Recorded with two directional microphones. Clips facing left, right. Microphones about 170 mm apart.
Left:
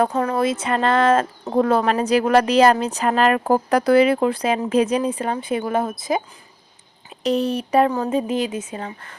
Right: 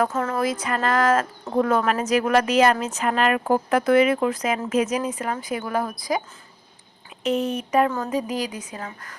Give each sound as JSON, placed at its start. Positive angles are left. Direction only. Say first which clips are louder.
{"t": 0.1, "sound": "speech", "louder": "left 4 dB", "side_deg": 15}
{"t": 7.3, "sound": "speech", "louder": "left 3 dB", "side_deg": 35}